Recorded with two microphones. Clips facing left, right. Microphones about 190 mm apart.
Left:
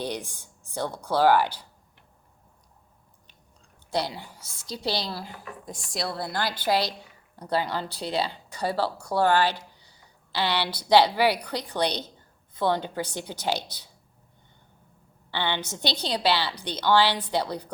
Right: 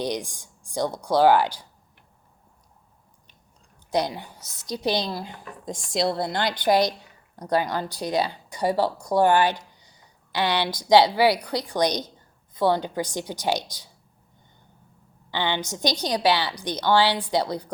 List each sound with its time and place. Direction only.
0.0 s a woman's voice: 15° right (ahead or behind)
3.9 s a woman's voice: 15° right (ahead or behind)
15.3 s a woman's voice: 15° right (ahead or behind)